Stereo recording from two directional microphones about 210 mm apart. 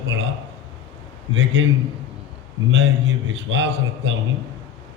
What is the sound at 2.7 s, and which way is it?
A man's voice, 60° right (ahead or behind).